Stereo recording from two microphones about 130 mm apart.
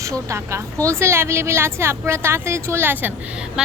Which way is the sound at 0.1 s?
25° right (ahead or behind).